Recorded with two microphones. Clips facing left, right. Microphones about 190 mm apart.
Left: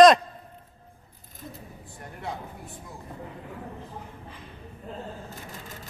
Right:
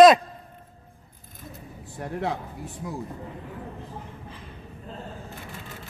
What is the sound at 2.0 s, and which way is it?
Speech, 75° right (ahead or behind).